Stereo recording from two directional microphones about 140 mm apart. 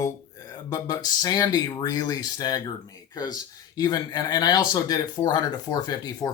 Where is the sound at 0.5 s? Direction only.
25° left (ahead or behind).